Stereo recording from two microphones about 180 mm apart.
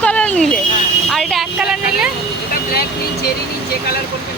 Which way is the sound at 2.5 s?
60° left (ahead or behind).